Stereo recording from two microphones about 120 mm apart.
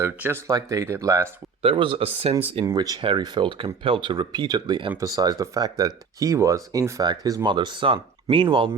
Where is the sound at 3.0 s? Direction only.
40° right (ahead or behind).